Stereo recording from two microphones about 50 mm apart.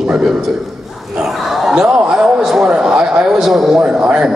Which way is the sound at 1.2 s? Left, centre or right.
Centre.